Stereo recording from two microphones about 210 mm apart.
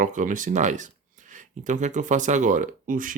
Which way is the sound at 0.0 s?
40° right (ahead or behind).